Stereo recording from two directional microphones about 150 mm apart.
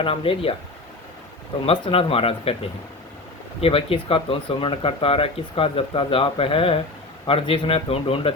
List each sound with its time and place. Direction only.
0.0 s speech: 35° left (ahead or behind)
1.6 s speech: 40° left (ahead or behind)
3.6 s speech: 40° left (ahead or behind)